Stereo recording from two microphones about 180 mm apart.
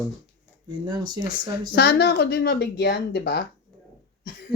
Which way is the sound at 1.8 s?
65° left (ahead or behind).